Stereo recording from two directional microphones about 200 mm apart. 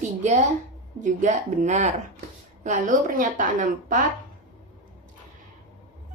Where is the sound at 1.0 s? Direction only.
35° right (ahead or behind).